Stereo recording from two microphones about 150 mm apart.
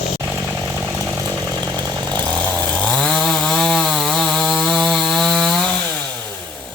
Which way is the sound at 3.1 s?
Centre (ahead or behind).